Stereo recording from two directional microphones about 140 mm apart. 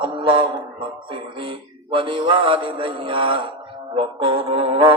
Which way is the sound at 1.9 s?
40° right (ahead or behind).